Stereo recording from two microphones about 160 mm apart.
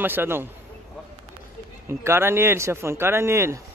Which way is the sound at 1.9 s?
15° right (ahead or behind).